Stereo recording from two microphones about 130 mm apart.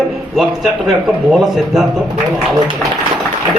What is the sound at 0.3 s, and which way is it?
A man's voice, centre (ahead or behind).